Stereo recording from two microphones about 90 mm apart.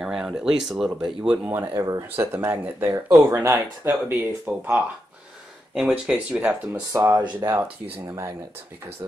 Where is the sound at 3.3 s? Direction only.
40° right (ahead or behind).